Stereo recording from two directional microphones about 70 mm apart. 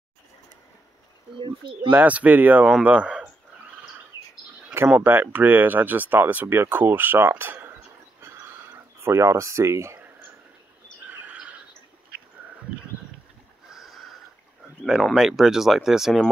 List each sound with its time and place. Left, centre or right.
1.9 s speech: right
5.0 s speech: right
8.2 s a sound: right
11.1 s squawk: right
13.7 s snort: centre
15.1 s speech: centre